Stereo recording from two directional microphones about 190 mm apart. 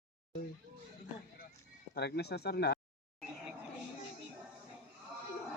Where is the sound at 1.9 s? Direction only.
60° left (ahead or behind).